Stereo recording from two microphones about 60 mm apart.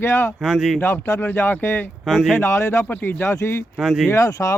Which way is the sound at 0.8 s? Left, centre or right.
Left.